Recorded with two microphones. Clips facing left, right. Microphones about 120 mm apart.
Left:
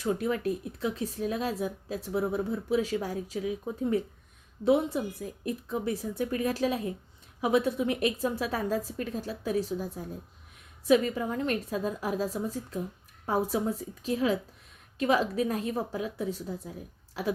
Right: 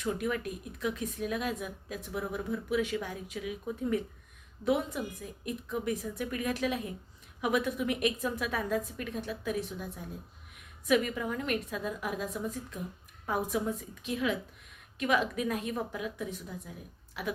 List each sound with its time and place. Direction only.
0.0 s speech: 30° left (ahead or behind)